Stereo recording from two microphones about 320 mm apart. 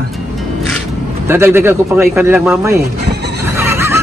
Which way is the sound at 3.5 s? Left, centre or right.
Centre.